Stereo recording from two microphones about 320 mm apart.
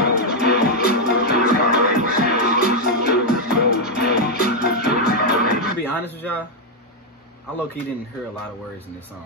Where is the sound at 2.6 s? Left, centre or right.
Left.